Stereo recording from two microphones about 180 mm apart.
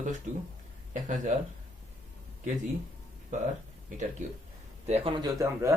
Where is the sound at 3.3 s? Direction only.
45° right (ahead or behind).